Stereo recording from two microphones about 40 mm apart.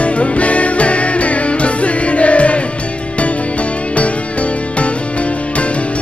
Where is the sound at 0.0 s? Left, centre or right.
Left.